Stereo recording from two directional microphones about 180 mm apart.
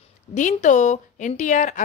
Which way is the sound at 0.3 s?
40° left (ahead or behind).